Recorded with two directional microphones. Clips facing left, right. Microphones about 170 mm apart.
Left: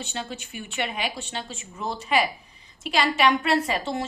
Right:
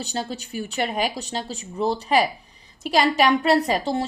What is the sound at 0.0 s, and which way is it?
A woman's voice, 35° right (ahead or behind).